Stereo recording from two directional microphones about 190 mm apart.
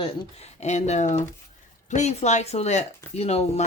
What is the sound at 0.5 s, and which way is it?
Speech, 35° left (ahead or behind).